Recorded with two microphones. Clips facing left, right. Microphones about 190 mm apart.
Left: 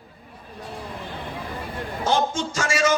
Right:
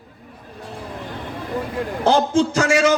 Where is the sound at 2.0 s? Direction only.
65° right (ahead or behind).